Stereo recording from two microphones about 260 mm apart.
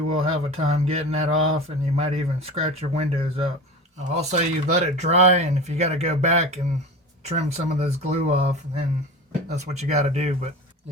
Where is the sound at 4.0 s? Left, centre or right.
Right.